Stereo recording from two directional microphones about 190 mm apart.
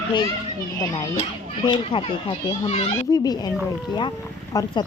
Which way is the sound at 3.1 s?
20° left (ahead or behind).